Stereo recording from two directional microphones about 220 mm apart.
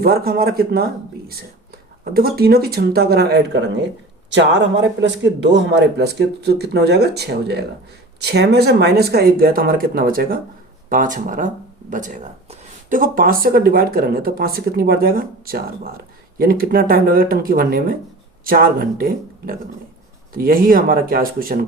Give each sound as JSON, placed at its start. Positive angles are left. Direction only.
{"t": 0.0, "sound": "speech", "side_deg": -45}
{"t": 2.1, "sound": "speech", "side_deg": -45}